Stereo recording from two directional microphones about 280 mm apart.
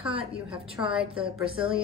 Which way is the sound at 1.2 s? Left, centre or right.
Centre.